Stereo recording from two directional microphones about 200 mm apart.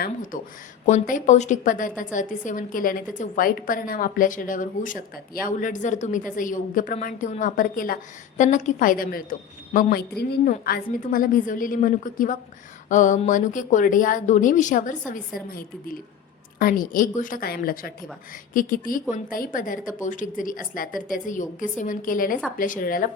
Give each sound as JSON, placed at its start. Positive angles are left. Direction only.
{"t": 0.0, "sound": "a woman's voice", "side_deg": 45}
{"t": 16.6, "sound": "a woman's voice", "side_deg": 45}